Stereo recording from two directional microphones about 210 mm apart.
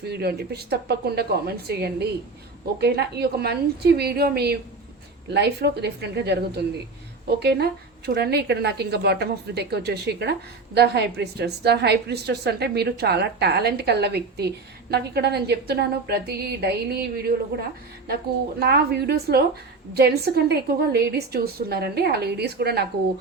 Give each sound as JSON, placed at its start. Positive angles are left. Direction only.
{"t": 0.0, "sound": "a woman's voice", "side_deg": -50}
{"t": 18.6, "sound": "a woman's voice", "side_deg": -50}